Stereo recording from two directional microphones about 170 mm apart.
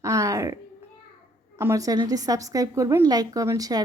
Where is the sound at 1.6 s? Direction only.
15° right (ahead or behind).